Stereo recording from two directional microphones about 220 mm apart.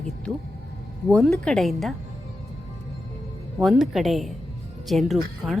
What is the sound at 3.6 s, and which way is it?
Speech, centre (ahead or behind).